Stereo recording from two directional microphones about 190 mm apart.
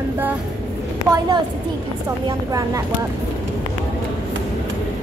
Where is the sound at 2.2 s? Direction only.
20° right (ahead or behind).